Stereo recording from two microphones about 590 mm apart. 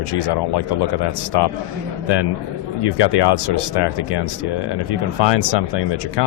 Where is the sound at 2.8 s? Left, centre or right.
Left.